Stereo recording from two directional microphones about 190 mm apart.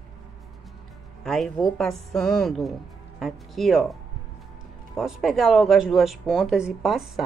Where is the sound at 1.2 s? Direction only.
Centre (ahead or behind).